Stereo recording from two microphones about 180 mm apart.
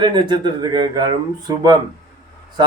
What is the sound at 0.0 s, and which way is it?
Speech, 25° right (ahead or behind).